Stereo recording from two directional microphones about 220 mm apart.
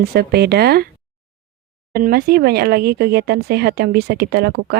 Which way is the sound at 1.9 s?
45° right (ahead or behind).